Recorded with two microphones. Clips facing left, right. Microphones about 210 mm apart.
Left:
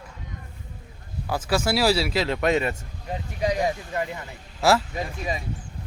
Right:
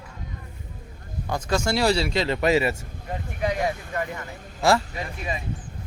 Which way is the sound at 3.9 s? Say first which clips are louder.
Left 1 dB; 20° left (ahead or behind).